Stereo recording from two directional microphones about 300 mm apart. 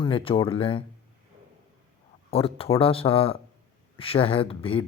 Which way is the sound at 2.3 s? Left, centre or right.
Centre.